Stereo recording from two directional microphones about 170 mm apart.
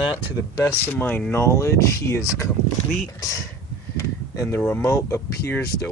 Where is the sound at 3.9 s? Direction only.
15° left (ahead or behind).